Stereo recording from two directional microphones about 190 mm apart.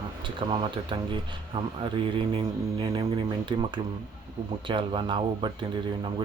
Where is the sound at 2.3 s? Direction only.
25° right (ahead or behind).